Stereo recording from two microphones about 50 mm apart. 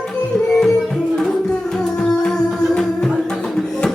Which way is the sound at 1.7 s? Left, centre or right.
Centre.